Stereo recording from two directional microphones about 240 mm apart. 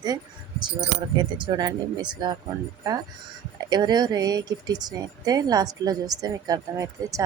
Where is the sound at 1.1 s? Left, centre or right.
Centre.